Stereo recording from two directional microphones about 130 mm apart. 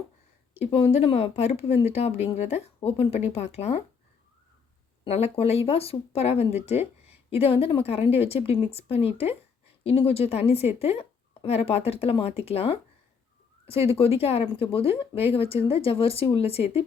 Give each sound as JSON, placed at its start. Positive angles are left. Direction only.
{"t": 0.5, "sound": "speech", "side_deg": 55}
{"t": 5.0, "sound": "speech", "side_deg": 50}
{"t": 14.0, "sound": "speech", "side_deg": 50}